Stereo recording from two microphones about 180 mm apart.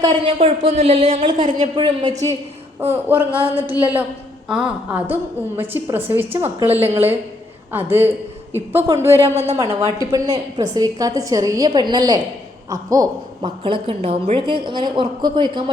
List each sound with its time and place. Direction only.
0.0 s a woman's voice: 30° right (ahead or behind)
2.8 s a woman's voice: 10° right (ahead or behind)
9.3 s speech: 35° right (ahead or behind)
9.6 s a woman's voice: 20° right (ahead or behind)